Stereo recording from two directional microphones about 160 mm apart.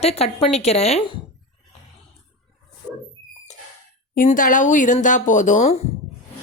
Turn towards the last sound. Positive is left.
turn(degrees=45)  # may be behind; listen again after turning